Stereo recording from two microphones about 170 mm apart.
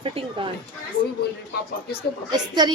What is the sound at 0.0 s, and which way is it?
Speech, 35° right (ahead or behind).